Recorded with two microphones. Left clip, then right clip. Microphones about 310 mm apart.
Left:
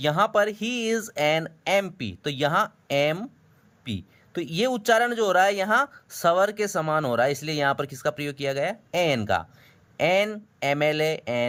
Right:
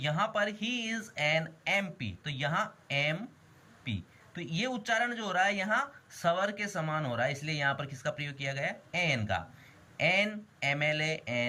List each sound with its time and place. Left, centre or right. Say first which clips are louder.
0.0 s a man's voice: left 9 dB; centre